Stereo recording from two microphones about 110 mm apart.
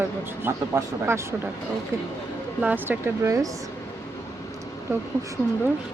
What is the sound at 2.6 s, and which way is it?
Speech, 15° right (ahead or behind).